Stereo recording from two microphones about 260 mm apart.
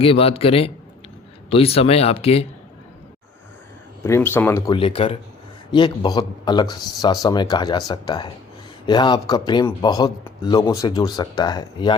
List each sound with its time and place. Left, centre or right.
0.0 s speech: left
4.0 s a man's voice: centre